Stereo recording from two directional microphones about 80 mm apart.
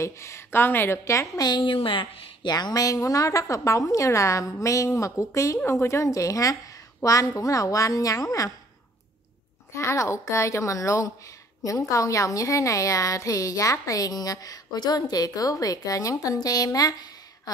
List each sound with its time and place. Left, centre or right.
0.0 s a woman's voice: left
1.5 s a woman's voice: left
9.8 s a woman's voice: left